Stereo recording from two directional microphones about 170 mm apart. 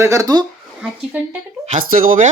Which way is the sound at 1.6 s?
50° right (ahead or behind).